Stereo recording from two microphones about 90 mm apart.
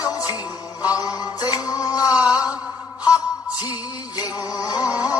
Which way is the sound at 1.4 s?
45° left (ahead or behind).